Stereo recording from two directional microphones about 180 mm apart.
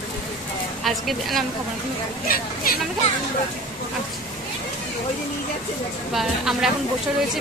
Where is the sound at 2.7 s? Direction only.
55° left (ahead or behind).